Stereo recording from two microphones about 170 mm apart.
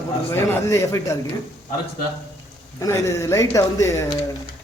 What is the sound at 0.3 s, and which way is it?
Speech, 15° left (ahead or behind).